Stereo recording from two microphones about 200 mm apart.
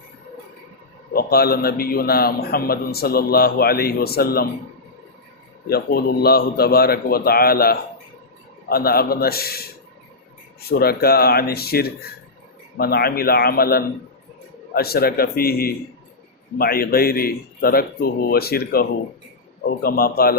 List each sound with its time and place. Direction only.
1.1 s a man's voice: 50° left (ahead or behind)
5.6 s a man's voice: 50° left (ahead or behind)
10.7 s a man's voice: 50° left (ahead or behind)